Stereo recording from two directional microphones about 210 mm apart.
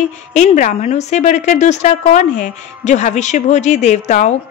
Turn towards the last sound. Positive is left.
turn(degrees=35)  # may be behind; listen again after turning